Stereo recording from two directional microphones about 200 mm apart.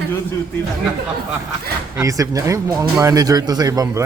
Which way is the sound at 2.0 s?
15° right (ahead or behind).